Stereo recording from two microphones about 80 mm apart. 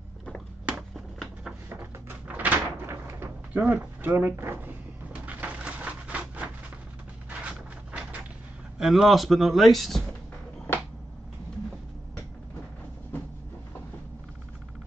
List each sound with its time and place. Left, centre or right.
1.7 s door: right
2.9 s a sound: right
8.7 s speech: centre